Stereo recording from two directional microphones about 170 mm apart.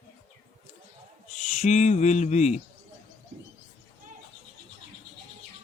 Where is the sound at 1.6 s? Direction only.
45° left (ahead or behind).